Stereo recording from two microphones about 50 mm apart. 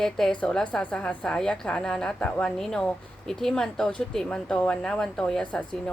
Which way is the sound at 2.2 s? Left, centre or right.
Left.